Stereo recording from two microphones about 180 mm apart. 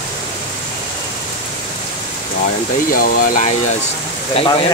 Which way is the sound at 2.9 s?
50° left (ahead or behind).